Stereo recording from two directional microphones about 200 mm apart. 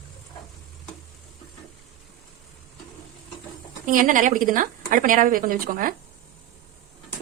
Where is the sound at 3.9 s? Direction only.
40° right (ahead or behind).